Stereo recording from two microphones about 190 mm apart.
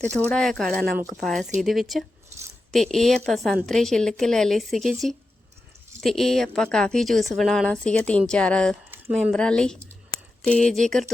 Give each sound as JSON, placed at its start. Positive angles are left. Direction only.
{"t": 0.1, "sound": "a woman's voice", "side_deg": 5}
{"t": 6.0, "sound": "a woman's voice", "side_deg": 0}